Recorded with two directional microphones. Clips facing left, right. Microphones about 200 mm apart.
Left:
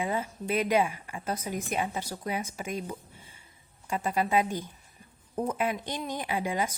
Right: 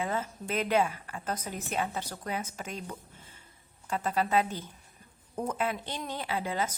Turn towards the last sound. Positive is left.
turn(degrees=15)  # may be behind; listen again after turning